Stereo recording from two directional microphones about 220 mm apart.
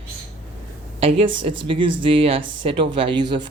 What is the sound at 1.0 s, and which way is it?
Speech, 20° right (ahead or behind).